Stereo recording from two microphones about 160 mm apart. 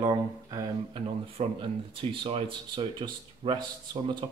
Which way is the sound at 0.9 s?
35° right (ahead or behind).